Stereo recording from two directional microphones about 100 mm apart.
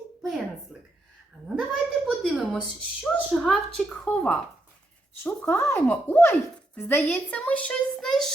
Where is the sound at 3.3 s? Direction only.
10° left (ahead or behind).